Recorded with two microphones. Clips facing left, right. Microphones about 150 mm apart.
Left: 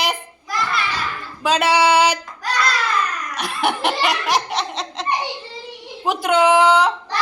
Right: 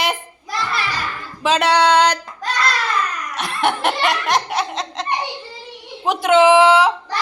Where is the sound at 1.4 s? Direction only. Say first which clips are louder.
Right 1 dB; centre (ahead or behind).